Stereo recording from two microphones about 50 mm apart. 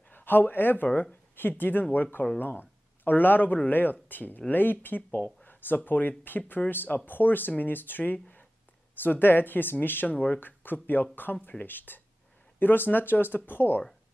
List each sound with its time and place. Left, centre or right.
0.1 s speech: left
10.0 s speech: left